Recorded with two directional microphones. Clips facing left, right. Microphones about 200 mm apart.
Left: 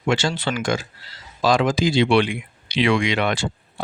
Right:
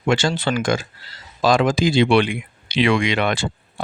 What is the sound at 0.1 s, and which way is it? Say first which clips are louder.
Speech: right 2 dB; 50° right (ahead or behind).